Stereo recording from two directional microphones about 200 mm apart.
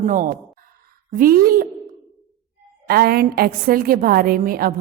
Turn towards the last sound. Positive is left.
turn(degrees=-45)  # may be behind; listen again after turning